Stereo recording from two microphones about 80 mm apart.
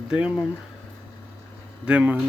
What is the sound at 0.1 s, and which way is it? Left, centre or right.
Speech, centre.